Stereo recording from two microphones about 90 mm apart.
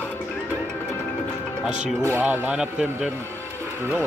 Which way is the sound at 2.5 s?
10° right (ahead or behind).